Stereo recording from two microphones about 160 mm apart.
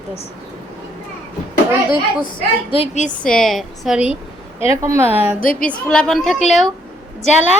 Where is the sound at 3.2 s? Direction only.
5° left (ahead or behind).